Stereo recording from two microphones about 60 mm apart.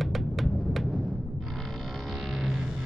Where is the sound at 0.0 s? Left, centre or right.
Centre.